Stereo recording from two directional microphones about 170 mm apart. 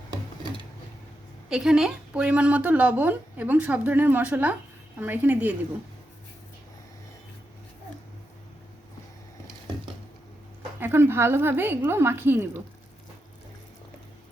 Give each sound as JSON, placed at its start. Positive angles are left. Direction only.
{"t": 1.5, "sound": "speech", "side_deg": -5}
{"t": 10.8, "sound": "speech", "side_deg": -15}